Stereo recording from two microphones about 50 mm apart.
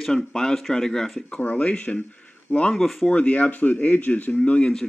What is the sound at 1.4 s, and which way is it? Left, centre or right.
Speech, left.